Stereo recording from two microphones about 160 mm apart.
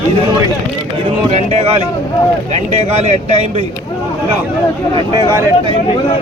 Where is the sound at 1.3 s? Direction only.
40° right (ahead or behind).